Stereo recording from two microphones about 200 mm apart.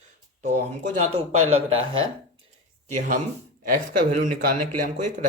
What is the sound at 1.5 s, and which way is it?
Speech, 30° right (ahead or behind).